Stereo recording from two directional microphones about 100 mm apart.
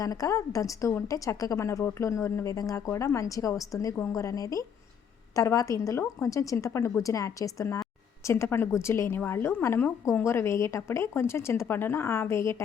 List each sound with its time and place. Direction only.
0.0 s a woman's voice: 35° left (ahead or behind)